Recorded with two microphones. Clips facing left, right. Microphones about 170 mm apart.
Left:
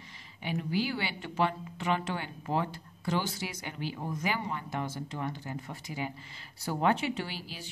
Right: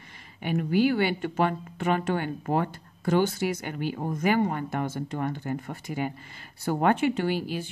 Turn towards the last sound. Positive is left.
turn(degrees=-55)  # may be behind; listen again after turning